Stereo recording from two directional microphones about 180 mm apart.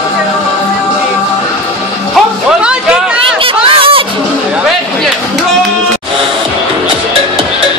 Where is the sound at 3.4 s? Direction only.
30° right (ahead or behind).